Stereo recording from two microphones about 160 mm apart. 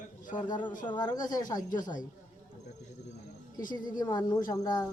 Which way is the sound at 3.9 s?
25° left (ahead or behind).